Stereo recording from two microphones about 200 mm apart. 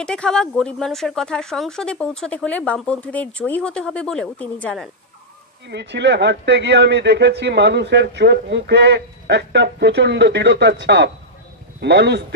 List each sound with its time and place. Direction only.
0.0 s speech: 5° left (ahead or behind)
5.7 s a man's voice: 60° right (ahead or behind)